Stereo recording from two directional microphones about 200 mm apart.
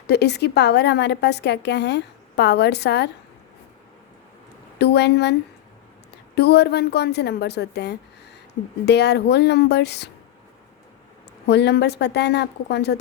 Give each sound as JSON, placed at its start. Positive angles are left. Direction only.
{"t": 0.1, "sound": "a woman's voice", "side_deg": 55}
{"t": 4.8, "sound": "a woman's voice", "side_deg": 55}
{"t": 6.3, "sound": "a woman's voice", "side_deg": 55}
{"t": 11.4, "sound": "a woman's voice", "side_deg": 55}